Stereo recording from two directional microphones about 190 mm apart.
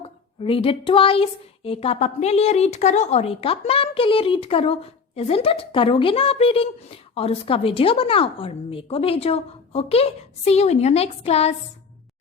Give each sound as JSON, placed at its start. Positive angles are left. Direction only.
{"t": 0.0, "sound": "speech", "side_deg": 30}